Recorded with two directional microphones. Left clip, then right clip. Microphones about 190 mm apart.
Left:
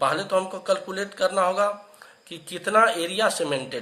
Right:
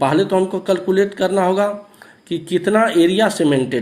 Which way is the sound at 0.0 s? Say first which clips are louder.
Right 7 dB; 15° right (ahead or behind).